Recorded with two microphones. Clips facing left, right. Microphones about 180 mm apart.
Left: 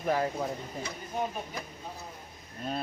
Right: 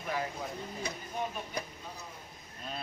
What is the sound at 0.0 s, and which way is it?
Speech, 45° left (ahead or behind).